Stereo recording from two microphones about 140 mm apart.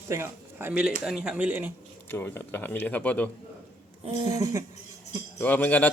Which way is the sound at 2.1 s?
15° left (ahead or behind).